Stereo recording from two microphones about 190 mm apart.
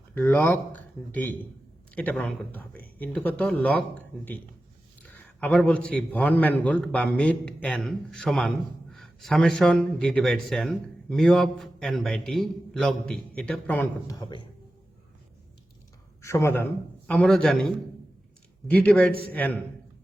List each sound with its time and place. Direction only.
0.1 s speech: 10° left (ahead or behind)
5.4 s a man's voice: 5° left (ahead or behind)
14.2 s speech: 25° left (ahead or behind)
16.2 s a man's voice: 15° left (ahead or behind)